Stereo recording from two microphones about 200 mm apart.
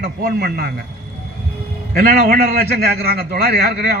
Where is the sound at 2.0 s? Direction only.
50° right (ahead or behind).